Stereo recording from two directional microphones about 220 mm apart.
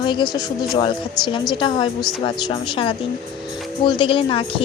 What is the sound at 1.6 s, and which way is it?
Speech, 20° left (ahead or behind).